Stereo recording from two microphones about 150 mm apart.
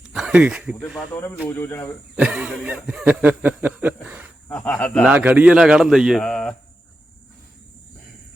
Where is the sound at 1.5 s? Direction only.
15° left (ahead or behind).